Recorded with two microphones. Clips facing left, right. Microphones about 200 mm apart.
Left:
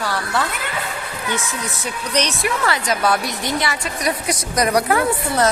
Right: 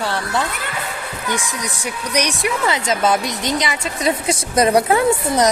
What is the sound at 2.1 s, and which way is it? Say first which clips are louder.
Speech: right 1 dB; 15° right (ahead or behind).